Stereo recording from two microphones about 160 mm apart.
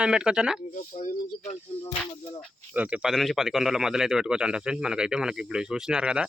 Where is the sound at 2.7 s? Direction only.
10° right (ahead or behind).